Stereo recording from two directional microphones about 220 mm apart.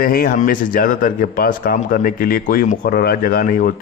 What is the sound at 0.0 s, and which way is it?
A man's voice, 40° left (ahead or behind).